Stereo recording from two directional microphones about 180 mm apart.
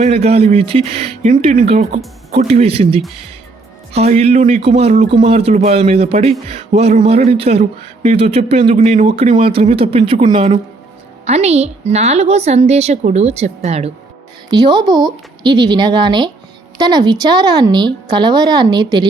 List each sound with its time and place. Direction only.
0.0 s speech: 35° right (ahead or behind)
14.5 s speech: 25° right (ahead or behind)